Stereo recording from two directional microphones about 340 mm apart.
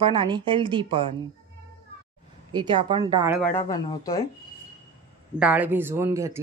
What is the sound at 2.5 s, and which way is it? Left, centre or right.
Speech, centre.